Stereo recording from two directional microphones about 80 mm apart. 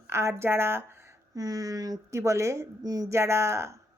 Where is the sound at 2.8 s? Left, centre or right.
Right.